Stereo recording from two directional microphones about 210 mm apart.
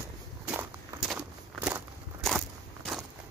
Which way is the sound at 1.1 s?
10° right (ahead or behind).